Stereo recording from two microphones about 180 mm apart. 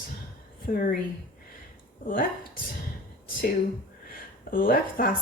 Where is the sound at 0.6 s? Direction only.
55° left (ahead or behind).